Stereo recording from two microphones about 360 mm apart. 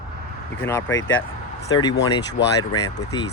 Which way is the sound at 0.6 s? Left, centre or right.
Centre.